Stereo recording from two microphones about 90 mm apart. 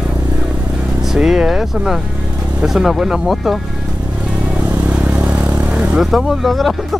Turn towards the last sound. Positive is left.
turn(degrees=0)  # may be behind; listen again after turning